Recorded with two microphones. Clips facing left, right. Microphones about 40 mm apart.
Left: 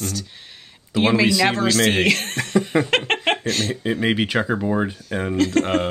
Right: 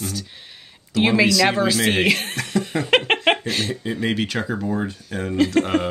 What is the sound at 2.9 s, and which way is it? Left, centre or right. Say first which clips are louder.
Speech: right 3 dB; centre.